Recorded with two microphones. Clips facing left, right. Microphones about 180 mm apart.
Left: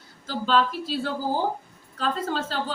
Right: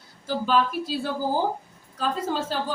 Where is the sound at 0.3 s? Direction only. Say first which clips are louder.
Even; 10° right (ahead or behind).